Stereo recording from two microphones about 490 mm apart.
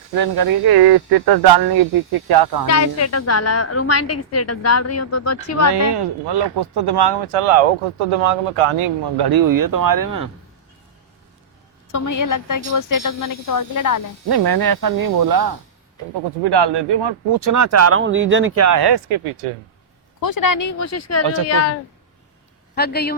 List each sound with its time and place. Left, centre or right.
0.2 s speech: right
2.6 s a woman's voice: left
5.7 s speech: right
7.3 s speech: right
9.1 s speech: right
11.9 s a woman's voice: left
14.3 s speech: right
16.4 s speech: right
18.8 s speech: right
20.2 s a woman's voice: left
22.7 s speech: centre